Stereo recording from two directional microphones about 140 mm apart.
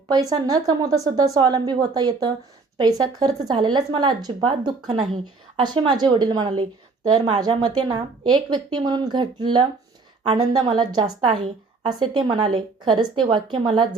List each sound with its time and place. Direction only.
0.1 s a woman's voice: 30° right (ahead or behind)